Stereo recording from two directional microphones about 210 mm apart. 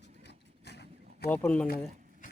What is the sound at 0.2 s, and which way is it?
Vehicle, 55° left (ahead or behind).